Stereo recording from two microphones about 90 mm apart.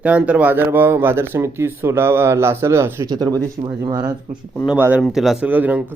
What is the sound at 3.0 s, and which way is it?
Speech, 45° right (ahead or behind).